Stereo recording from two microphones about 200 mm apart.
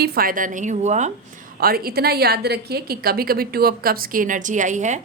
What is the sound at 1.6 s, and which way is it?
A woman's voice, 50° right (ahead or behind).